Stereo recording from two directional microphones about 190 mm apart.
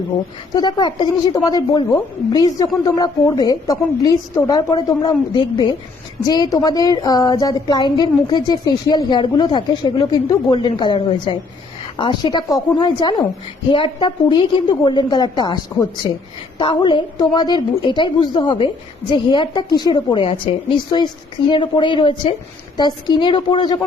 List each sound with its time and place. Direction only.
0.5 s a woman's voice: 20° left (ahead or behind)